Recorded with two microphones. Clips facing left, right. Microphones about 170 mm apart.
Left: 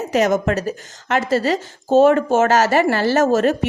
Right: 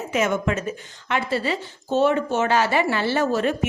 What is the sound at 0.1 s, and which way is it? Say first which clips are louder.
Speech: left 5 dB; 40° left (ahead or behind).